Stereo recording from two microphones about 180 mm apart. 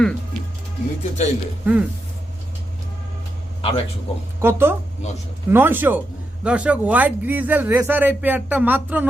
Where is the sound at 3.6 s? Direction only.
30° left (ahead or behind).